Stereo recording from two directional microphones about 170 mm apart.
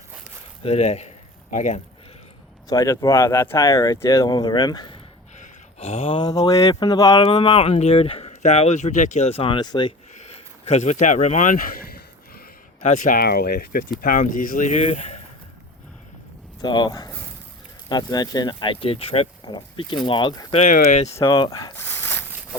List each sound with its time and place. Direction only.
0.6 s speech: 40° left (ahead or behind)
2.6 s speech: 20° left (ahead or behind)
5.4 s speech: 35° left (ahead or behind)
10.2 s speech: 40° left (ahead or behind)
16.6 s speech: 25° left (ahead or behind)
20.7 s speech: 55° left (ahead or behind)
21.2 s speech: 30° left (ahead or behind)
21.8 s a sound: 15° left (ahead or behind)